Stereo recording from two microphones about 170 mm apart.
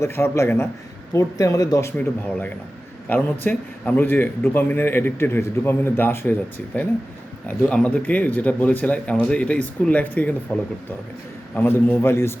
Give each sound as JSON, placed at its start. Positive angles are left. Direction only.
{"t": 0.0, "sound": "a man's voice", "side_deg": 15}
{"t": 2.2, "sound": "a man's voice", "side_deg": 10}
{"t": 7.4, "sound": "a man's voice", "side_deg": 10}
{"t": 11.5, "sound": "a man's voice", "side_deg": 10}